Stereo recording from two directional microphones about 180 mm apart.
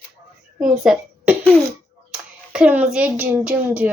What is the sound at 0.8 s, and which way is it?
Speech, 5° right (ahead or behind).